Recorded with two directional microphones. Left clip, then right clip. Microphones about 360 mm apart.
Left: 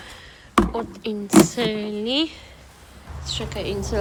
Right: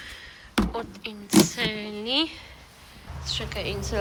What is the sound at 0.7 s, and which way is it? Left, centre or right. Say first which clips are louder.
A woman's voice: left 6 dB; centre.